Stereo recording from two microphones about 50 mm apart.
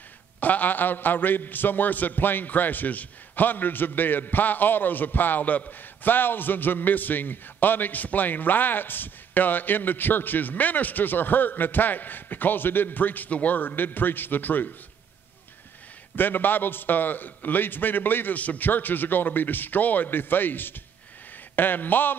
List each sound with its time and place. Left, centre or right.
0.4 s a man's voice: left
16.2 s a man's voice: left